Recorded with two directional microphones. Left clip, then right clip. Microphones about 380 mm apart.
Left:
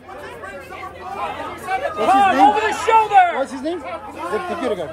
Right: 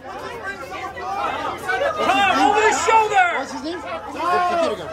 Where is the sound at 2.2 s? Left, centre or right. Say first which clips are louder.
Even; centre.